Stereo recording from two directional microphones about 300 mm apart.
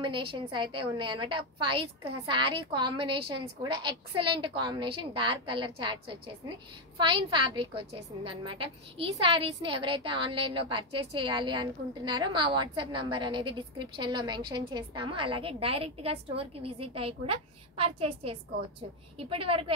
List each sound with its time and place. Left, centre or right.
0.0 s a woman's voice: centre